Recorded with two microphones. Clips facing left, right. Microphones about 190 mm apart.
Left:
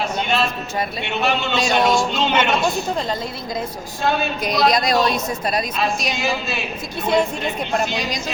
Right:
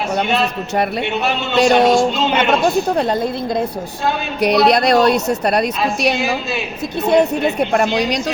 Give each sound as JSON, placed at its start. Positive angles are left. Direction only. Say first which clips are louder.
{"t": 1.5, "sound": "a woman's voice", "louder": "right 8 dB", "side_deg": -65}